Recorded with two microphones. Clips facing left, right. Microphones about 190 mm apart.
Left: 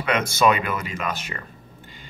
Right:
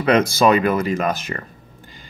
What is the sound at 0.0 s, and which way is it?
Speech, 35° right (ahead or behind).